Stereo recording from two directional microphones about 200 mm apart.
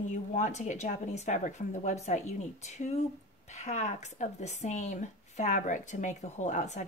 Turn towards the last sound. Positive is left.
turn(degrees=35)  # may be behind; listen again after turning